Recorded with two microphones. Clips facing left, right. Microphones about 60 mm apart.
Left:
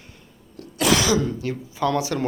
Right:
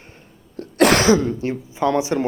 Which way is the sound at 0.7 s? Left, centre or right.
Right.